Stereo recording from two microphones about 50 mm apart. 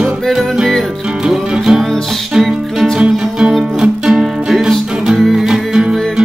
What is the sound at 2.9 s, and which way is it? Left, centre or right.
Music, right.